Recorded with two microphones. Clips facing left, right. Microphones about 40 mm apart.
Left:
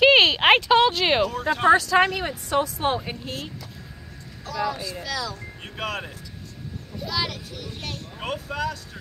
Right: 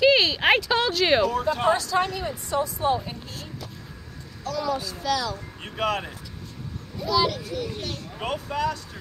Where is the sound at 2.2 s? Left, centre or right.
Left.